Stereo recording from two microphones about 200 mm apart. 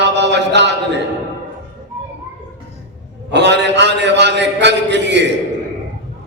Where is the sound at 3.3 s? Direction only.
60° right (ahead or behind).